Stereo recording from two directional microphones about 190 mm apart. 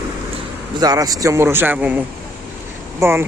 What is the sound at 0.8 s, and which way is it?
Speech, 20° right (ahead or behind).